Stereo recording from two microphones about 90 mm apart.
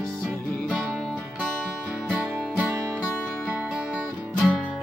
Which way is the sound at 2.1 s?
15° right (ahead or behind).